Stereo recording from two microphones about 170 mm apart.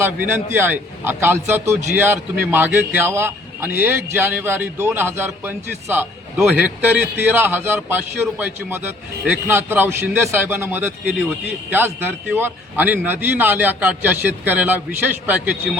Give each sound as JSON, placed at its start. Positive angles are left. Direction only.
{"t": 0.0, "sound": "a man's voice", "side_deg": -10}
{"t": 9.2, "sound": "a man's voice", "side_deg": -10}